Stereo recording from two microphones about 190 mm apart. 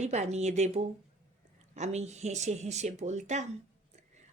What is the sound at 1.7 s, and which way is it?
Speech, 35° right (ahead or behind).